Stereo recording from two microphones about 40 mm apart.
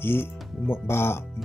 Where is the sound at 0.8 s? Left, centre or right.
Left.